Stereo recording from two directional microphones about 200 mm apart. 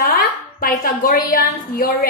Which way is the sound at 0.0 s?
50° left (ahead or behind).